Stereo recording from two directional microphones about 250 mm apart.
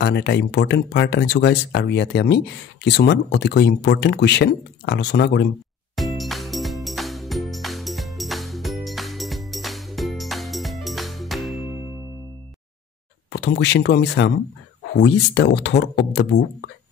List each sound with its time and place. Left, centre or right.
0.0 s speech: left
5.9 s music: centre
13.3 s speech: left